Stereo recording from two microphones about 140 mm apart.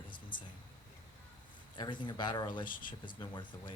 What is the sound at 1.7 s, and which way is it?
Speech, 35° left (ahead or behind).